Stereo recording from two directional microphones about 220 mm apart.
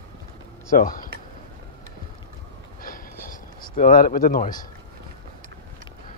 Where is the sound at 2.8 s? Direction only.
40° left (ahead or behind).